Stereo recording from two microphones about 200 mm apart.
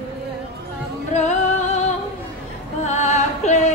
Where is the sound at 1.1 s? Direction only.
35° left (ahead or behind).